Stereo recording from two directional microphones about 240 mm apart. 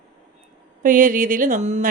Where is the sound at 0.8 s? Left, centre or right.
Right.